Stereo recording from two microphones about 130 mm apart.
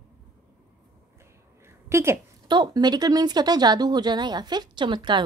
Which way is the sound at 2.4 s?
35° right (ahead or behind).